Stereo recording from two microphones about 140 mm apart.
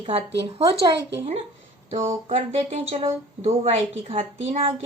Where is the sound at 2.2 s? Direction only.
50° right (ahead or behind).